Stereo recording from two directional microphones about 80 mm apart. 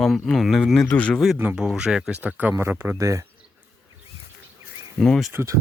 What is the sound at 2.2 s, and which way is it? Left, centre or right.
Speech, right.